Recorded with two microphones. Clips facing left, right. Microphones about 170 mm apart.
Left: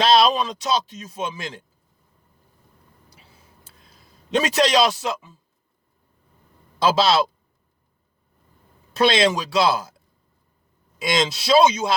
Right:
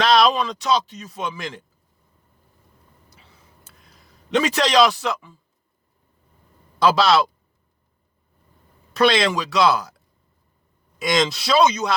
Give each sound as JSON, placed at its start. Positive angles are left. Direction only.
{"t": 0.0, "sound": "speech", "side_deg": 20}
{"t": 3.3, "sound": "a sound", "side_deg": 25}
{"t": 6.8, "sound": "speech", "side_deg": 25}
{"t": 8.9, "sound": "speech", "side_deg": 20}
{"t": 11.0, "sound": "speech", "side_deg": 25}